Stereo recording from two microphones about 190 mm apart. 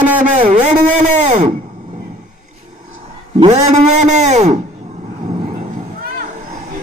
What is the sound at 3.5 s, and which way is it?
Speech, 40° right (ahead or behind).